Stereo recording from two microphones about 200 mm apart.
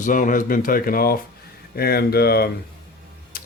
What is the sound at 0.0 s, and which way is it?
Speech, 40° left (ahead or behind).